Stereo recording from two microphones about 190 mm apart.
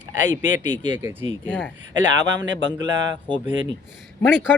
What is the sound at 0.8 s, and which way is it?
Speech, 25° right (ahead or behind).